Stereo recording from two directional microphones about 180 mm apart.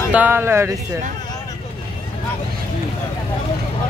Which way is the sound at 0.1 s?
10° right (ahead or behind).